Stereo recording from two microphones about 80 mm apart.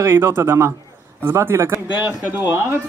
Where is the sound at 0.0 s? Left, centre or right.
Right.